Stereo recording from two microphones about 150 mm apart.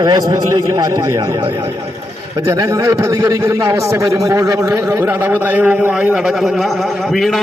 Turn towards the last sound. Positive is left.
turn(degrees=0)  # may be behind; listen again after turning